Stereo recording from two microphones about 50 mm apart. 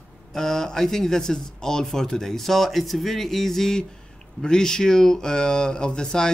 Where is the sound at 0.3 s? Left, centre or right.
Centre.